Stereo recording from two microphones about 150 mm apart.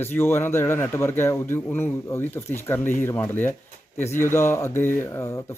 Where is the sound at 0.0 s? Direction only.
15° left (ahead or behind).